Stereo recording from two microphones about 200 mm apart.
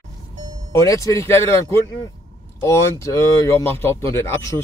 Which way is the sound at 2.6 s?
15° left (ahead or behind).